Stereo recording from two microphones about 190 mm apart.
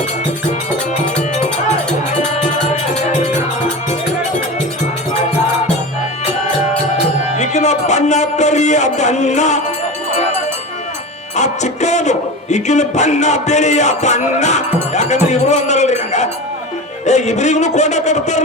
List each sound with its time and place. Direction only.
7.3 s music: 40° left (ahead or behind)
11.3 s speech: 35° left (ahead or behind)